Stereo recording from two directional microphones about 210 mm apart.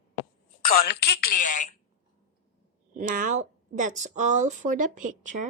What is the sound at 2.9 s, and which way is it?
A woman's voice, 40° right (ahead or behind).